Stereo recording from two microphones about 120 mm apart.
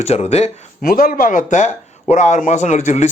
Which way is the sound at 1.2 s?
90° left.